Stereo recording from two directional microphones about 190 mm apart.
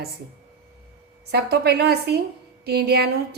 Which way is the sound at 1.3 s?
60° right (ahead or behind).